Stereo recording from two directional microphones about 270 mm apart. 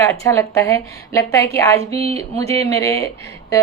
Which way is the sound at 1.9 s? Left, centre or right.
Right.